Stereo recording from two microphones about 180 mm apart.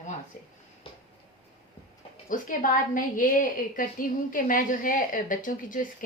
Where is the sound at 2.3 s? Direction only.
45° left (ahead or behind).